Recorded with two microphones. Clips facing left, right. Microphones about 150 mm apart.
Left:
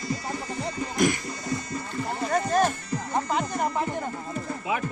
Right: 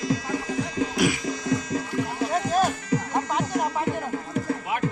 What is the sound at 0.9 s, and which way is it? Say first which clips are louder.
Music: left 1 dB; 5° right (ahead or behind).